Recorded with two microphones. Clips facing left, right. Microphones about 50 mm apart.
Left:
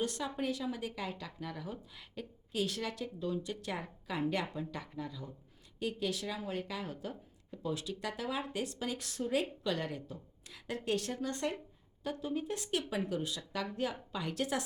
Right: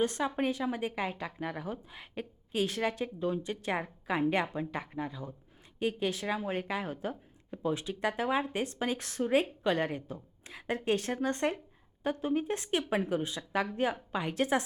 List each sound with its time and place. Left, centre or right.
0.0 s a woman's voice: right